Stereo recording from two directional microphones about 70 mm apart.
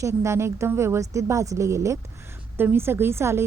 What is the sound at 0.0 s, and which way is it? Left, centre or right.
A woman's voice, right.